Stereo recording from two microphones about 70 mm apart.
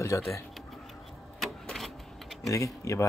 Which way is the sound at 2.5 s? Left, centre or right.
Left.